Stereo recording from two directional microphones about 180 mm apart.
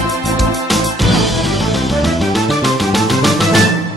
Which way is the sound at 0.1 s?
Centre (ahead or behind).